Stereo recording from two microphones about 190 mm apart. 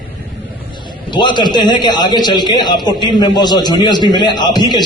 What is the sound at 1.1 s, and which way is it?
A man's voice, 25° left (ahead or behind).